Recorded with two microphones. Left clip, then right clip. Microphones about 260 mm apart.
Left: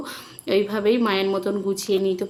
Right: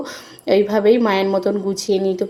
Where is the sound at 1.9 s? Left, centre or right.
Right.